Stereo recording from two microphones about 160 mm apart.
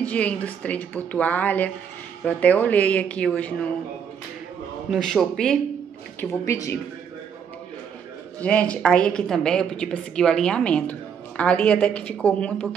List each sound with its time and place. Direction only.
0.0 s a woman's voice: 10° left (ahead or behind)
4.9 s a man's voice: centre (ahead or behind)
6.4 s speech: 20° left (ahead or behind)
8.4 s a woman's voice: 10° left (ahead or behind)